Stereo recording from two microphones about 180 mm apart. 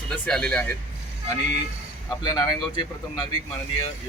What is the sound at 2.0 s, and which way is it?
Speech, 25° left (ahead or behind).